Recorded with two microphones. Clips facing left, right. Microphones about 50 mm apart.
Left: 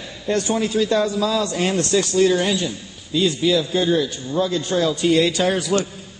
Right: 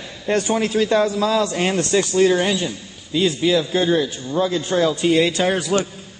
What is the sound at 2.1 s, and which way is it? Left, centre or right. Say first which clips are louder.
A man's voice: right 1 dB; right.